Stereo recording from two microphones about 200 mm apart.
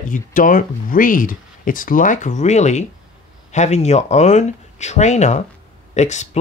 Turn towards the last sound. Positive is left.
turn(degrees=35)  # may be behind; listen again after turning